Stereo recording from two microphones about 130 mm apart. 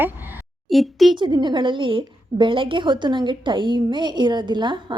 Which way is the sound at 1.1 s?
35° right (ahead or behind).